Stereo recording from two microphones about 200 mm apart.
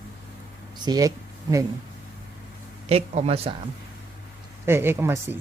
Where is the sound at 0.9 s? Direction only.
20° right (ahead or behind).